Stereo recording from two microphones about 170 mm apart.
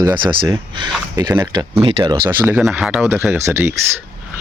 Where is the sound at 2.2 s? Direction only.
10° right (ahead or behind).